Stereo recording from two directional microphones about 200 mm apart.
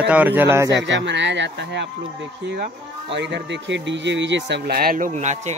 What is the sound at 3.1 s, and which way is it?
Speech, 60° right (ahead or behind).